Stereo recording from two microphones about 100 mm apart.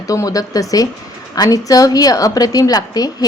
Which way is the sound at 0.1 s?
35° left (ahead or behind).